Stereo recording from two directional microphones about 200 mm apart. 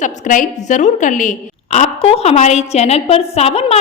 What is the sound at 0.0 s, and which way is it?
A woman's voice, 40° left (ahead or behind).